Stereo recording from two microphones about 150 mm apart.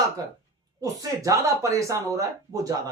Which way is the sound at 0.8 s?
20° right (ahead or behind).